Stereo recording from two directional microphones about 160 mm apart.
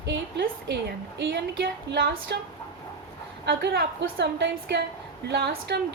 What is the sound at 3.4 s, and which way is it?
A woman's voice, 90° right.